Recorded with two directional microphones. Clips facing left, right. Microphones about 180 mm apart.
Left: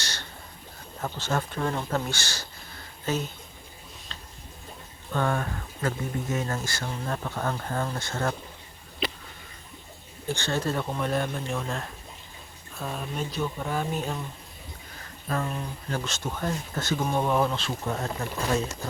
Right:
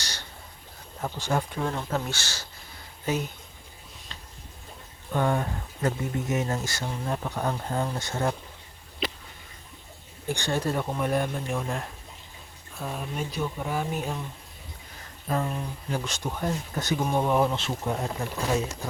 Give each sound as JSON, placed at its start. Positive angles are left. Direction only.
{"t": 0.0, "sound": "a sound", "side_deg": -10}
{"t": 1.0, "sound": "speech", "side_deg": -15}
{"t": 5.1, "sound": "speech", "side_deg": -20}
{"t": 10.2, "sound": "speech", "side_deg": -15}
{"t": 15.3, "sound": "speech", "side_deg": -15}